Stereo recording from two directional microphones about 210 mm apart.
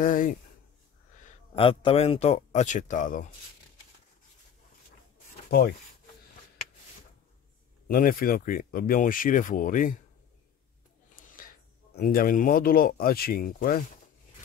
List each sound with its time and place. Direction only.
0.0 s speech: 40° left (ahead or behind)
1.5 s speech: 25° left (ahead or behind)
7.9 s speech: 40° left (ahead or behind)
11.9 s speech: 40° left (ahead or behind)